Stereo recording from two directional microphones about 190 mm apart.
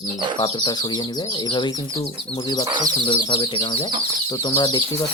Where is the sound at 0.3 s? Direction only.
25° left (ahead or behind).